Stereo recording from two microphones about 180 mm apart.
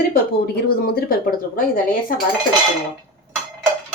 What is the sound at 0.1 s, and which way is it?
A woman's voice, 60° left (ahead or behind).